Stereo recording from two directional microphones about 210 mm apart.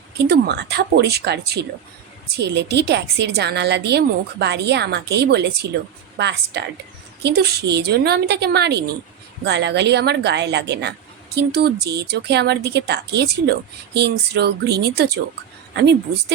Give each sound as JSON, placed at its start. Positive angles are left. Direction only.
{"t": 0.3, "sound": "a woman's voice", "side_deg": -50}